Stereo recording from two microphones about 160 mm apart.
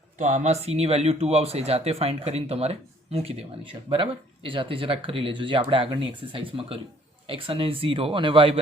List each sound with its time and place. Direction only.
0.2 s speech: 50° right (ahead or behind); by 8.6 s 35° right (ahead or behind)